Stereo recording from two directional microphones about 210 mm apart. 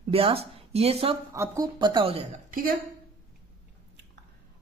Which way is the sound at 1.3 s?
15° right (ahead or behind).